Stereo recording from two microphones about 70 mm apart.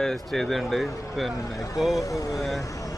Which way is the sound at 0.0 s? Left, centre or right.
Centre.